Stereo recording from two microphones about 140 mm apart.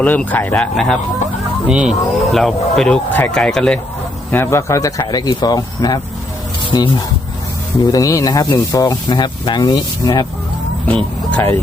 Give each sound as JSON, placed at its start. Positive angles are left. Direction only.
{"t": 0.0, "sound": "speech", "side_deg": 10}
{"t": 1.6, "sound": "speech", "side_deg": -5}
{"t": 4.3, "sound": "speech", "side_deg": 15}
{"t": 10.8, "sound": "speech", "side_deg": 10}